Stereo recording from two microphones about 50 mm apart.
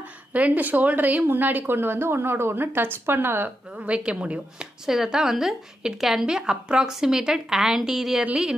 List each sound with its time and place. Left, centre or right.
0.3 s a woman's voice: right
3.7 s speech: right
4.8 s a woman's voice: centre